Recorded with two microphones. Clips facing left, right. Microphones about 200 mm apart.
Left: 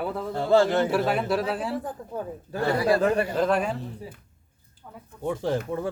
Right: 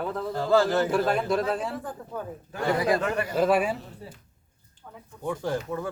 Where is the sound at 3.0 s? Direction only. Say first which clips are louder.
Left 5 dB; 35° left (ahead or behind).